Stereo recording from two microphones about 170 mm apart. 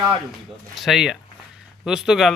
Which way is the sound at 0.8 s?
Centre (ahead or behind).